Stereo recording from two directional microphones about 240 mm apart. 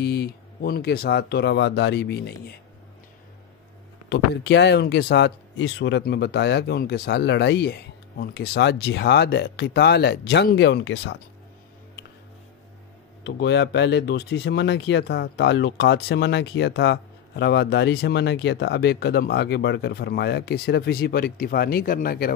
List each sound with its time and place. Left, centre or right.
0.0 s speech: left
4.1 s speech: left
13.2 s speech: left